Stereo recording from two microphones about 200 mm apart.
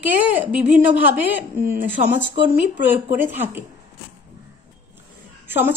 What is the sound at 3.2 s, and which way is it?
Speech, 10° right (ahead or behind).